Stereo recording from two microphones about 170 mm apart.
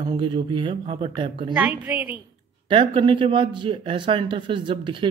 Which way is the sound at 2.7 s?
30° right (ahead or behind).